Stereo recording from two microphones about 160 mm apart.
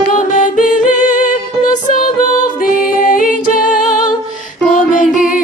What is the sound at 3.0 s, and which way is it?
A capella, 60° left (ahead or behind).